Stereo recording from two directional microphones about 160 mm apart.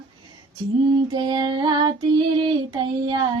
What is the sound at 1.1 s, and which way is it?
Child singing, 25° right (ahead or behind).